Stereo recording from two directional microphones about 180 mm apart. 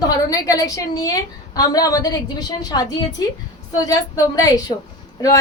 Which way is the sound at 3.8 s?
20° left (ahead or behind).